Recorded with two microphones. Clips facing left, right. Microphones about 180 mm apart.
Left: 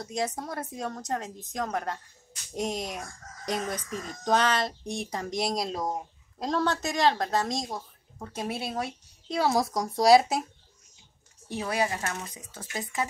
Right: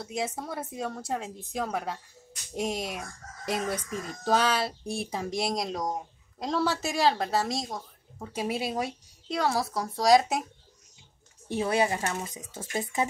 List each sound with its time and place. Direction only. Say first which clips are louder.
0.0 s a woman's voice: left 1 dB; 5° right (ahead or behind)
8.3 s speech: right 3 dB; 10° right (ahead or behind)
9.3 s speech: left 2 dB; 10° left (ahead or behind)
11.5 s speech: right 3 dB; 25° right (ahead or behind)